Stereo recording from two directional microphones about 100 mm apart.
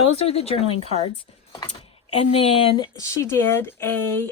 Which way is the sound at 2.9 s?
30° left (ahead or behind).